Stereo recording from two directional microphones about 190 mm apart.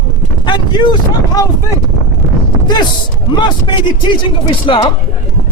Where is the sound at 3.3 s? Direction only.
25° left (ahead or behind).